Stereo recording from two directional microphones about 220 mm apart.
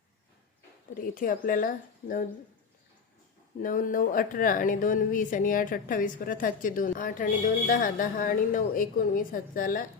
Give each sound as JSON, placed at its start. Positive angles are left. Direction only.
{"t": 0.9, "sound": "a woman's voice", "side_deg": 40}
{"t": 3.6, "sound": "a woman's voice", "side_deg": 40}